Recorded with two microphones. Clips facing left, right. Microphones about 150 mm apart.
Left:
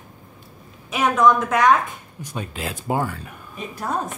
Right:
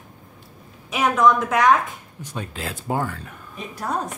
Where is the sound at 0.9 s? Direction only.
Centre (ahead or behind).